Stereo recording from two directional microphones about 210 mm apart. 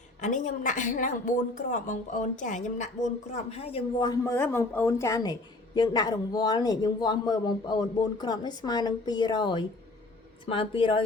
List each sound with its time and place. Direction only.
0.2 s a woman's voice: 35° left (ahead or behind)